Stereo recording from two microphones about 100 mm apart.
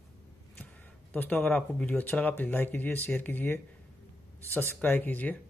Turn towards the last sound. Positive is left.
turn(degrees=15)  # may be behind; listen again after turning